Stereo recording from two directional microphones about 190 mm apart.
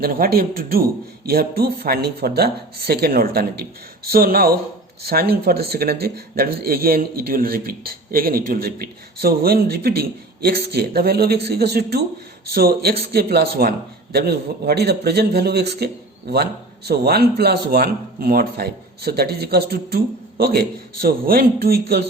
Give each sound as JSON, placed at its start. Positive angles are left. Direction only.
{"t": 0.0, "sound": "a man's voice", "side_deg": -50}